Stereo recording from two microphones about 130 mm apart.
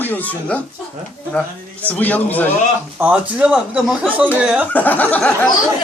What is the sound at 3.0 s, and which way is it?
Speech, 10° right (ahead or behind).